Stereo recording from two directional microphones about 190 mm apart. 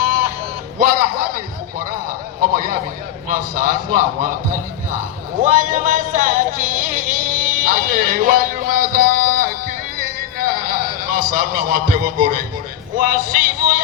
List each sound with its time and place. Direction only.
0.0 s sheep: 50° right (ahead or behind)
0.8 s music: 50° right (ahead or behind)
2.4 s a sound: 50° right (ahead or behind)
5.4 s music: 40° right (ahead or behind)